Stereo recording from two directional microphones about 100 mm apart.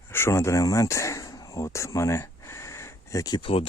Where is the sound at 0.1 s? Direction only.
25° left (ahead or behind).